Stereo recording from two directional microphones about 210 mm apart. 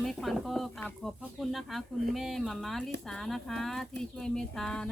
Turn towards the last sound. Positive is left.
turn(degrees=5)  # may be behind; listen again after turning